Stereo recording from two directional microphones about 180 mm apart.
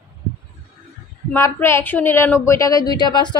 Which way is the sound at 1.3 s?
15° left (ahead or behind).